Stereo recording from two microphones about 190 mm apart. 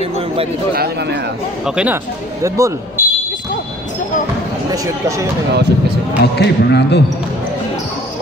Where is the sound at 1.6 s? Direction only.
5° right (ahead or behind).